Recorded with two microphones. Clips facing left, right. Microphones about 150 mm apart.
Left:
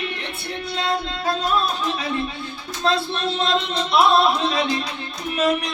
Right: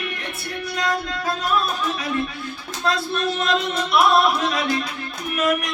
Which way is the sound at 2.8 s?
25° left (ahead or behind).